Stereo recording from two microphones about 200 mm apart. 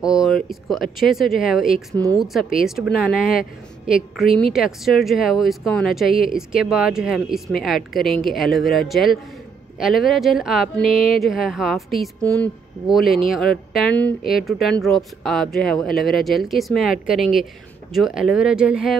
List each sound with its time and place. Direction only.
0.1 s speech: centre (ahead or behind)